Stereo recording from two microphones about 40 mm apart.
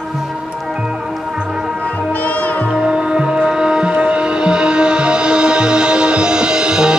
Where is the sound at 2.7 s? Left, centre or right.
Right.